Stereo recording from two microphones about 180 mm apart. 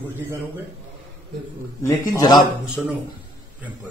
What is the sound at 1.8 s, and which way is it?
Speech, 15° left (ahead or behind).